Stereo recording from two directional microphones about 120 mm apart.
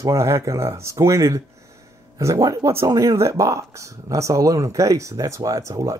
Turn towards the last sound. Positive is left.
turn(degrees=-25)  # may be behind; listen again after turning